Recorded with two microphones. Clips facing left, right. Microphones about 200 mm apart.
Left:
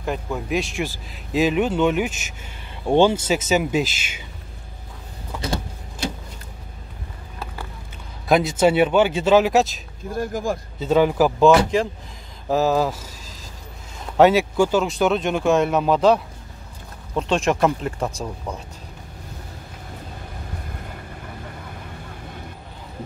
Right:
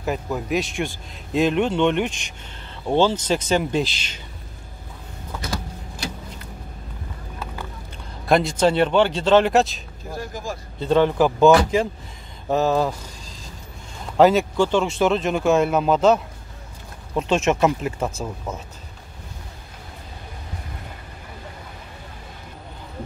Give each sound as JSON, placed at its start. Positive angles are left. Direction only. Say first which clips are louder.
{"t": 0.0, "sound": "a man's voice", "louder": "right 1 dB", "side_deg": -5}
{"t": 5.4, "sound": "vehicle", "louder": "left 4 dB", "side_deg": 25}
{"t": 8.3, "sound": "speech", "louder": "left 1 dB", "side_deg": 5}
{"t": 10.1, "sound": "speech", "louder": "left 7 dB", "side_deg": 55}
{"t": 10.8, "sound": "a man's voice", "louder": "even", "side_deg": 5}
{"t": 14.0, "sound": "a man's voice", "louder": "even", "side_deg": 0}